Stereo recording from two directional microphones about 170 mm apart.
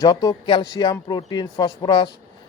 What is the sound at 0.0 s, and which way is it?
Speech, 25° left (ahead or behind).